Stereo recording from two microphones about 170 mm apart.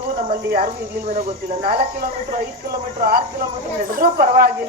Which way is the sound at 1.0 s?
50° right (ahead or behind).